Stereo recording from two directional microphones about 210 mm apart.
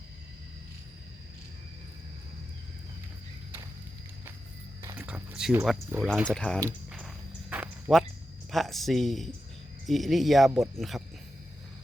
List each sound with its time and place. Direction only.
4.8 s speech: 10° right (ahead or behind)
6.6 s a sound: 15° right (ahead or behind)
8.4 s speech: centre (ahead or behind)